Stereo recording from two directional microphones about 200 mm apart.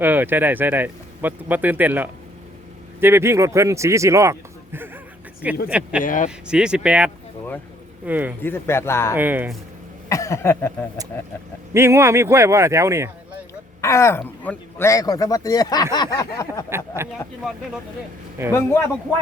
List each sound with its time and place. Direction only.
0.0 s speech: 10° right (ahead or behind)
6.0 s speech: 40° left (ahead or behind)
6.5 s speech: 5° right (ahead or behind)
8.4 s a man's voice: 10° left (ahead or behind)
9.1 s speech: 10° right (ahead or behind)
10.1 s a man's voice: 15° left (ahead or behind)
11.7 s speech: 10° right (ahead or behind)
13.8 s a man's voice: 15° left (ahead or behind)
17.0 s speech: 10° right (ahead or behind)
18.4 s speech: 15° right (ahead or behind)
19.1 s a man's voice: 10° left (ahead or behind)